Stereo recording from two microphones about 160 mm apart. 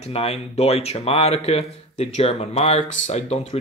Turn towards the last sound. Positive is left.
turn(degrees=40)  # may be behind; listen again after turning